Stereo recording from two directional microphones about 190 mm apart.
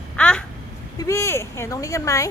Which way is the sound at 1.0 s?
15° left (ahead or behind).